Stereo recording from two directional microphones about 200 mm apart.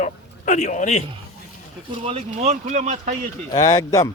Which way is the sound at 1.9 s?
30° right (ahead or behind).